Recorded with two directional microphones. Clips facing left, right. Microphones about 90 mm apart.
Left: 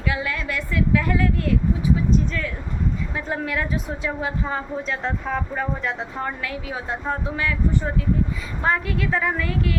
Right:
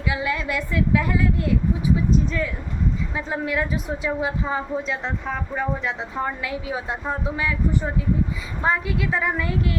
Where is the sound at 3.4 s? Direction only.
20° right (ahead or behind).